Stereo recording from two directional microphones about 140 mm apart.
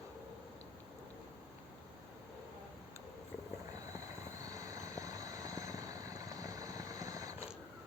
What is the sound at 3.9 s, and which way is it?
Vehicle, 25° right (ahead or behind).